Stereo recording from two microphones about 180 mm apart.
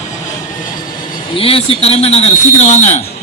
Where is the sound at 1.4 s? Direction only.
30° left (ahead or behind).